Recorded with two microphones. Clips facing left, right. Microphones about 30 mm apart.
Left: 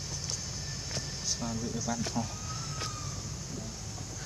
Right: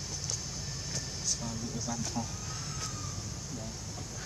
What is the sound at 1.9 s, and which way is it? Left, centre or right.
Speech, centre.